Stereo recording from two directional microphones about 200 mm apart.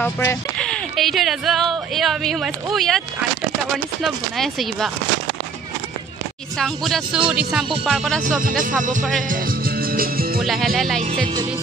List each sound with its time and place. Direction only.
0.0 s speech: 10° left (ahead or behind)
6.6 s speech: centre (ahead or behind)
9.3 s music: 45° right (ahead or behind)
10.4 s speech: centre (ahead or behind)